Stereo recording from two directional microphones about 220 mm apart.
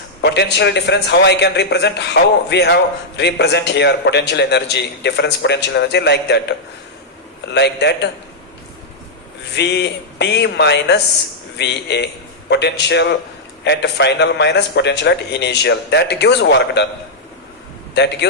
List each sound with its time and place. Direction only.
0.2 s a man's voice: 50° left (ahead or behind)
7.5 s a man's voice: 50° left (ahead or behind)
9.6 s a man's voice: 50° left (ahead or behind)
17.9 s a man's voice: 50° left (ahead or behind)